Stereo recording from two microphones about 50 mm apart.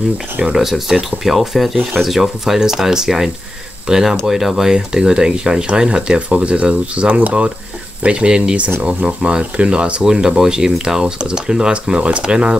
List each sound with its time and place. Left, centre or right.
0.4 s speech: centre